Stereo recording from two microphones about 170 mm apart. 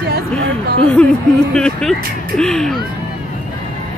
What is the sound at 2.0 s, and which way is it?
Speech, 60° right (ahead or behind).